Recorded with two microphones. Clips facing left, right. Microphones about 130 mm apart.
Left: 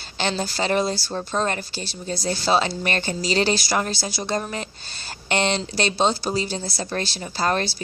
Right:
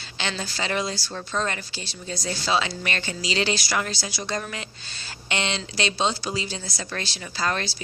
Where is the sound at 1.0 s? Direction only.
30° left (ahead or behind).